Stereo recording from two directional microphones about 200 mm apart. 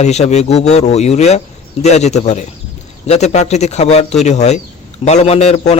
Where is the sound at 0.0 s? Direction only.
35° left (ahead or behind).